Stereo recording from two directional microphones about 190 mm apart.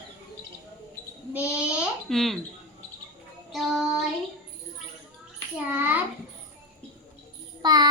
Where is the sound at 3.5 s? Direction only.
Centre (ahead or behind).